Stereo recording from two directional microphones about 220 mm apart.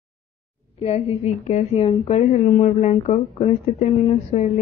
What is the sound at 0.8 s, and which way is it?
A woman's voice, 30° left (ahead or behind).